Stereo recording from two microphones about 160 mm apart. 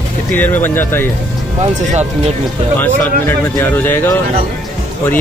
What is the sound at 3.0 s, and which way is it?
Speech, 10° left (ahead or behind).